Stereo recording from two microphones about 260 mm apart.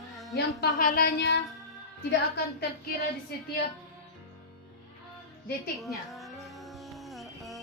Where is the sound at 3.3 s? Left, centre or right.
Left.